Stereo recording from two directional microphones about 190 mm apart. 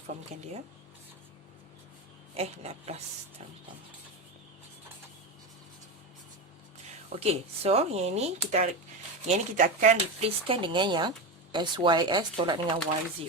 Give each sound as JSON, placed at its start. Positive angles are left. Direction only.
{"t": 2.3, "sound": "speech", "side_deg": -35}
{"t": 7.2, "sound": "speech", "side_deg": -30}